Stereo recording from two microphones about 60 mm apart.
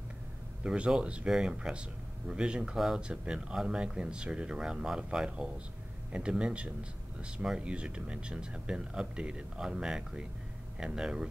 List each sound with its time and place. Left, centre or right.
0.7 s speech: centre